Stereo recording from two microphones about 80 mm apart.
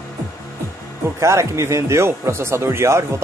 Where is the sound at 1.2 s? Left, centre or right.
Right.